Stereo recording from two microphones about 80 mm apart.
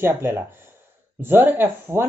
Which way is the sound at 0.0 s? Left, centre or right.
Right.